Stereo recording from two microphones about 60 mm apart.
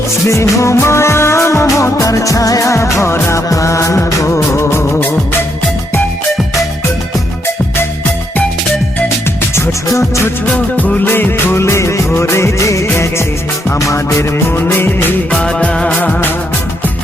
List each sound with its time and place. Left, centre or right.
0.3 s music: left
3.5 s music of bollywood: left
9.6 s music: left
10.5 s music: left
11.0 s music of bollywood: left
13.7 s music: left
14.5 s music: left
15.3 s music: centre